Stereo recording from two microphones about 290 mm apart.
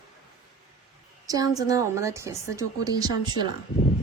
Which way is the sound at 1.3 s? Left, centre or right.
Centre.